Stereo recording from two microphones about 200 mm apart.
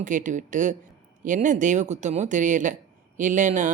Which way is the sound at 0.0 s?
40° right (ahead or behind).